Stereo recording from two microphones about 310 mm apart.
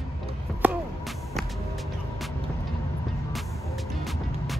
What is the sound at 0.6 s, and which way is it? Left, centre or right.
Music, centre.